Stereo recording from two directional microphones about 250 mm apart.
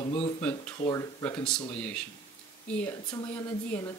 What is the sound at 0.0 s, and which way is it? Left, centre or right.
Speech, left.